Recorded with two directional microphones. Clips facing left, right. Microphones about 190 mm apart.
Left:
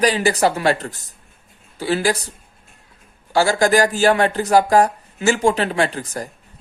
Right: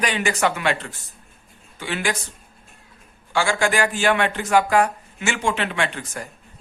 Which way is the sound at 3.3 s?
40° left (ahead or behind).